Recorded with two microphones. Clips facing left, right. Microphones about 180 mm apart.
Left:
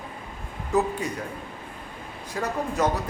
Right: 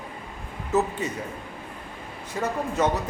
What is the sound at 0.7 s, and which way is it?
Speech, 5° right (ahead or behind).